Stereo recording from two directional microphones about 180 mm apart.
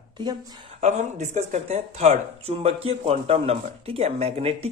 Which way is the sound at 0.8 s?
40° right (ahead or behind).